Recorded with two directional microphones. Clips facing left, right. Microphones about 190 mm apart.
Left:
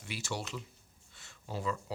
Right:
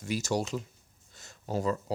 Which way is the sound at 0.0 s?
40° right (ahead or behind).